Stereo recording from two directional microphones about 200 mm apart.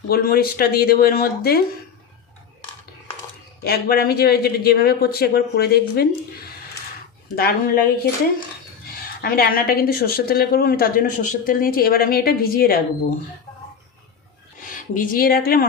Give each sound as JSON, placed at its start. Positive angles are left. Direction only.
{"t": 0.1, "sound": "a woman's voice", "side_deg": 50}
{"t": 3.6, "sound": "a woman's voice", "side_deg": 50}
{"t": 9.2, "sound": "a woman's voice", "side_deg": 50}
{"t": 14.6, "sound": "speech", "side_deg": 40}